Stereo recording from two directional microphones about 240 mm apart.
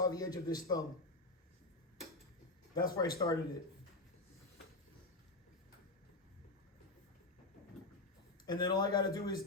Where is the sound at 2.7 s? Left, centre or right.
Centre.